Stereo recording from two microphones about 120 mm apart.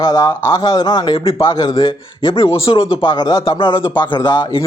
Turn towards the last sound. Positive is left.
turn(degrees=40)  # may be behind; listen again after turning